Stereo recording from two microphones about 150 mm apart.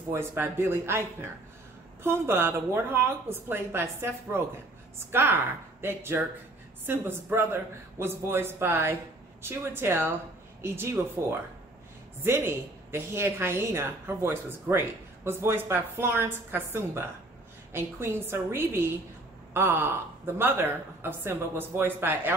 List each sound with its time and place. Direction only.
0.1 s a woman's voice: 15° right (ahead or behind)